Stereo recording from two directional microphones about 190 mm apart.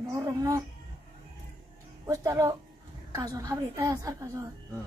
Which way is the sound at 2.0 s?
15° right (ahead or behind).